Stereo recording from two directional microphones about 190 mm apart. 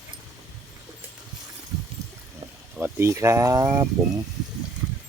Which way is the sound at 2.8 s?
15° right (ahead or behind).